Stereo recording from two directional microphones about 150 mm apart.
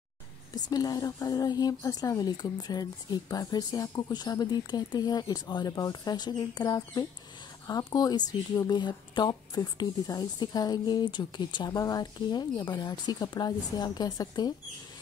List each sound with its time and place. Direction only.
0.7 s speech: 25° left (ahead or behind)